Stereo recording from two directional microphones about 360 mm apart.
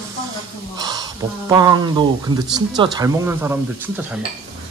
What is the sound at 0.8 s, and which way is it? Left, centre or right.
Speech, centre.